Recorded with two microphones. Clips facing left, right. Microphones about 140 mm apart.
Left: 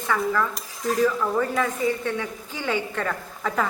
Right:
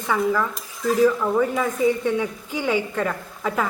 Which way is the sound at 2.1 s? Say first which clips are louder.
Right 5 dB; 15° right (ahead or behind).